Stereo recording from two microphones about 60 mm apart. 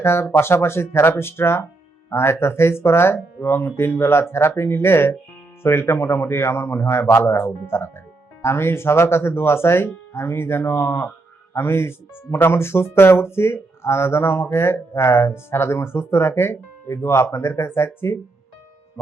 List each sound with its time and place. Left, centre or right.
0.0 s speech: left